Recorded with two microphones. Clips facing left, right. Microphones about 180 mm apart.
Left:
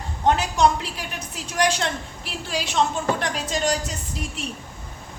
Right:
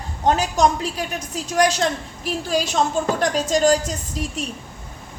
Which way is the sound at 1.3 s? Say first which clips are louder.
Right 4 dB; 40° right (ahead or behind).